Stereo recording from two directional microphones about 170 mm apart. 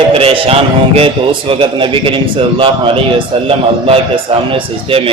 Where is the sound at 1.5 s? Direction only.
30° right (ahead or behind).